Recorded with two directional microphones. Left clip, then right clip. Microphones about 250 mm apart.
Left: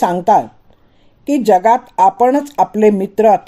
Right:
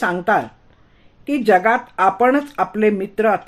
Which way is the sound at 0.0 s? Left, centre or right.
Left.